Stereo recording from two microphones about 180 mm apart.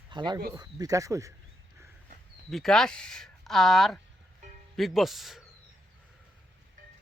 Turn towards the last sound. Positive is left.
turn(degrees=0)  # may be behind; listen again after turning